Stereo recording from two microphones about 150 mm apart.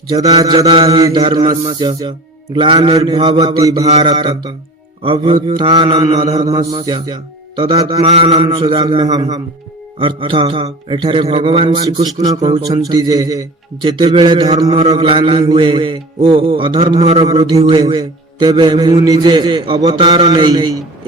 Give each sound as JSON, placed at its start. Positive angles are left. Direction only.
{"t": 0.3, "sound": "mantra", "side_deg": -25}
{"t": 0.6, "sound": "a man's voice", "side_deg": -40}
{"t": 3.8, "sound": "mantra", "side_deg": -45}
{"t": 4.1, "sound": "a man's voice", "side_deg": -30}
{"t": 12.9, "sound": "a man's voice", "side_deg": -25}
{"t": 17.2, "sound": "a man's voice", "side_deg": -30}